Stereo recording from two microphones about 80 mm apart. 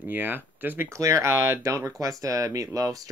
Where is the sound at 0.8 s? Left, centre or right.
Right.